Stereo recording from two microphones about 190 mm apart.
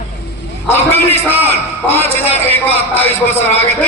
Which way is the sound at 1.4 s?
10° left (ahead or behind).